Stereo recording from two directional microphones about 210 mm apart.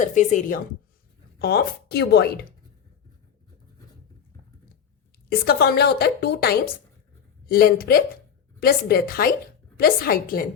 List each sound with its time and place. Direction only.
0.0 s speech: 35° left (ahead or behind)
1.4 s a woman's voice: 50° left (ahead or behind)
5.3 s a woman's voice: 45° left (ahead or behind)